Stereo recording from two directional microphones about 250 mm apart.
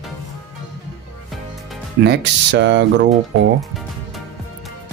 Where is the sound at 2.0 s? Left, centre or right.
Right.